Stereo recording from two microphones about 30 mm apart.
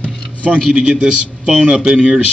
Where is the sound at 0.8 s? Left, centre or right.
Right.